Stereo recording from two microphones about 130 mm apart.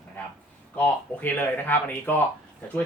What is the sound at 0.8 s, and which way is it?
Speech, 15° left (ahead or behind).